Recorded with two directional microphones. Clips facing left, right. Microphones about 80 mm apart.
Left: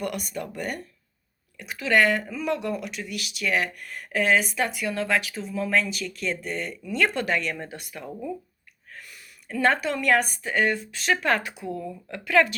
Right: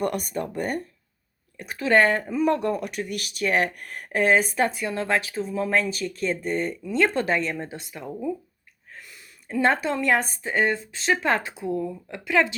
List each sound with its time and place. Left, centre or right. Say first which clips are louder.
0.0 s speech: right 4 dB; right